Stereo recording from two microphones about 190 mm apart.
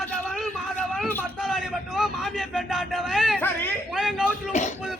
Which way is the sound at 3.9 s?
5° right (ahead or behind).